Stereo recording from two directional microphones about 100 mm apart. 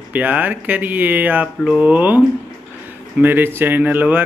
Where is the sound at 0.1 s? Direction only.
15° right (ahead or behind).